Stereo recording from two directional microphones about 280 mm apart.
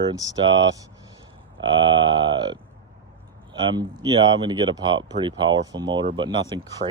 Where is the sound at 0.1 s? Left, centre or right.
Centre.